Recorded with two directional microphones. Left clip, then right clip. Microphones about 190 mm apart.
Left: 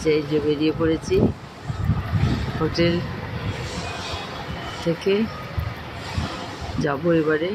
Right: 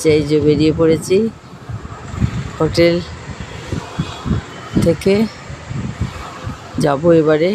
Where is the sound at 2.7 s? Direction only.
45° right (ahead or behind).